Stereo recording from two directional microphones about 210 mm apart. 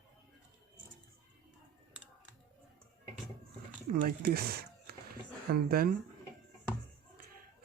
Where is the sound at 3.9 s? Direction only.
45° right (ahead or behind).